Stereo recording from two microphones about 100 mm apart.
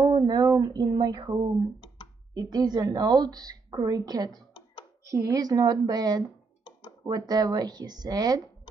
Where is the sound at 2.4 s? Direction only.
40° right (ahead or behind).